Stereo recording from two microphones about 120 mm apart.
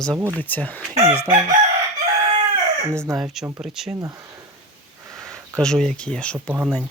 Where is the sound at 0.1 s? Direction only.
25° right (ahead or behind).